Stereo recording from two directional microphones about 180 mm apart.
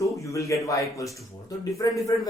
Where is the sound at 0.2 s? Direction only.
15° left (ahead or behind).